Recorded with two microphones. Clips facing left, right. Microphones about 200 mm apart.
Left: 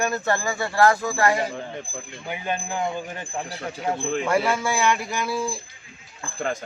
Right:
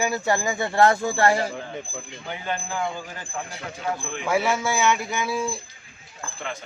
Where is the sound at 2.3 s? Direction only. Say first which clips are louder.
Left 2 dB; 15° left (ahead or behind).